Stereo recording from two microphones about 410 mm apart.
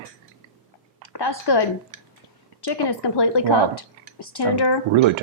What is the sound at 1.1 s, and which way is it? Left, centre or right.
A woman's voice, left.